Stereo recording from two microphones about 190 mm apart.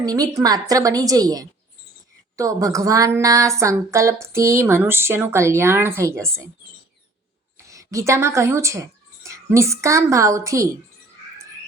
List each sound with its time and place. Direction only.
0.0 s a woman's voice: 20° right (ahead or behind)
7.7 s speech: 15° right (ahead or behind)